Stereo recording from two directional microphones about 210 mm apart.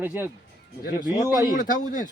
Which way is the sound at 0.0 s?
10° right (ahead or behind).